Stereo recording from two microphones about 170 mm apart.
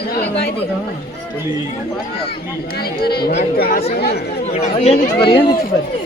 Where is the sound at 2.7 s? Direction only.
65° left (ahead or behind).